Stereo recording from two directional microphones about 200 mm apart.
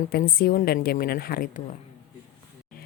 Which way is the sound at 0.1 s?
50° left (ahead or behind).